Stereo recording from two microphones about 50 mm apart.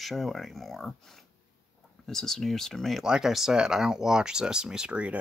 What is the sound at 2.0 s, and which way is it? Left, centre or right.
Speech, centre.